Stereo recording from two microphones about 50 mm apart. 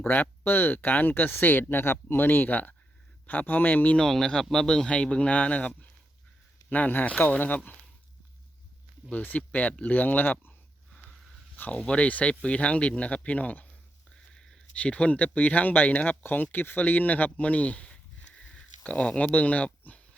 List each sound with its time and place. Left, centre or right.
0.1 s speech: left
3.9 s speech: centre; by 7.8 s left
9.1 s speech: left
11.7 s speech: left
14.3 s a sound: centre
14.8 s speech: left